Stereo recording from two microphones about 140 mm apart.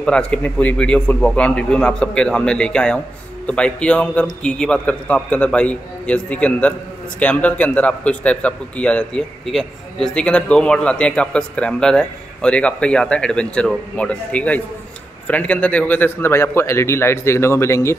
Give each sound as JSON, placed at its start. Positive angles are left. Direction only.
{"t": 0.0, "sound": "a man's voice", "side_deg": 5}